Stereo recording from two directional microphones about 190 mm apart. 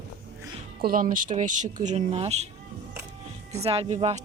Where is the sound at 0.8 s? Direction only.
45° right (ahead or behind).